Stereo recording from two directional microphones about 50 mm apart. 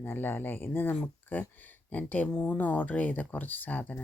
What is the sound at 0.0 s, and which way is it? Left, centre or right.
Speech, left.